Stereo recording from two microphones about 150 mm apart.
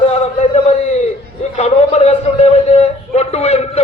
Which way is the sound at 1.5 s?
45° left (ahead or behind).